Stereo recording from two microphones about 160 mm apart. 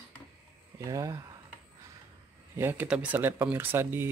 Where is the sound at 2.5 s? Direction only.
15° right (ahead or behind).